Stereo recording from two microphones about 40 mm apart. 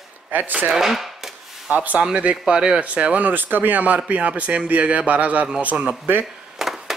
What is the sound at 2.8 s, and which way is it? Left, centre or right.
A man's voice, right.